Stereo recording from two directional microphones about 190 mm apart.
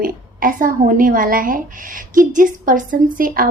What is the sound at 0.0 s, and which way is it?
A woman's voice, 45° right (ahead or behind).